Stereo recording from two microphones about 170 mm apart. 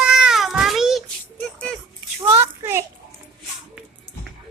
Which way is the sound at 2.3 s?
15° right (ahead or behind).